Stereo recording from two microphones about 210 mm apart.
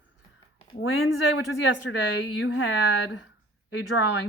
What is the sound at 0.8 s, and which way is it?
Speech, 65° left (ahead or behind).